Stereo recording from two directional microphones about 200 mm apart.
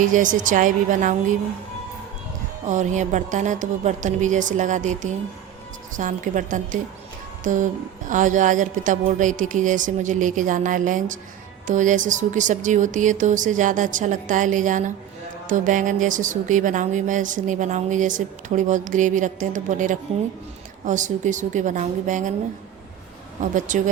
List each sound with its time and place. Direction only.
0.0 s speech: 40° right (ahead or behind)
2.6 s speech: 35° right (ahead or behind)
23.4 s speech: 40° right (ahead or behind)